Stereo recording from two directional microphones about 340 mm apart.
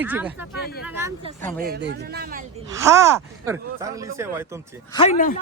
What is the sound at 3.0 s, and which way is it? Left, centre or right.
Speech, centre.